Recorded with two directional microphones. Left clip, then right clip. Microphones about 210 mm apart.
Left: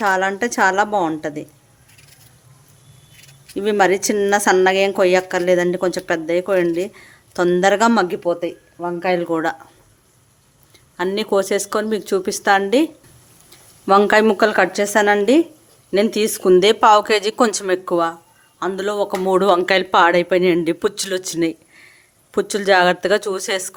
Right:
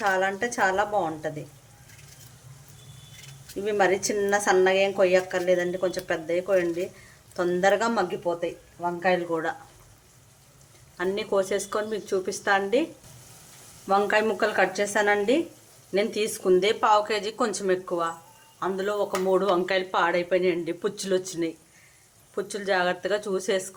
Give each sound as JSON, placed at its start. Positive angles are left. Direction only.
{"t": 0.0, "sound": "a woman's voice", "side_deg": 55}
{"t": 3.6, "sound": "a woman's voice", "side_deg": 55}
{"t": 10.9, "sound": "a woman's voice", "side_deg": 50}